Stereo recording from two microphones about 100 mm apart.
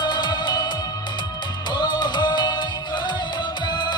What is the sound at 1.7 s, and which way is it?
Music, 50° left (ahead or behind).